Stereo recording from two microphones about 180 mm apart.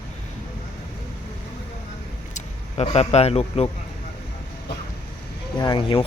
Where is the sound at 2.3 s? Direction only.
35° left (ahead or behind).